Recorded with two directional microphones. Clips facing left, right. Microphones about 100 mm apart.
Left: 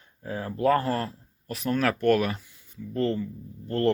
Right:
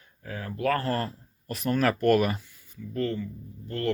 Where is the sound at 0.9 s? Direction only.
Centre (ahead or behind).